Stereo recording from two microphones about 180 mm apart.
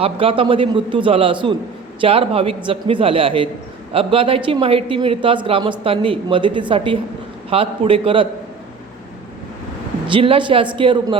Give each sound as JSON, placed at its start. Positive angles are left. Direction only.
{"t": 0.0, "sound": "a man's voice", "side_deg": -30}
{"t": 10.1, "sound": "speech", "side_deg": -30}